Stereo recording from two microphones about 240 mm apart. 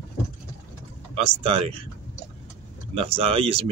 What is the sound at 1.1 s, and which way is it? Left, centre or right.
Speech, right.